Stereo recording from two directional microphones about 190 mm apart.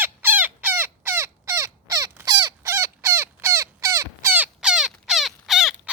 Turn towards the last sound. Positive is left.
turn(degrees=0)  # may be behind; listen again after turning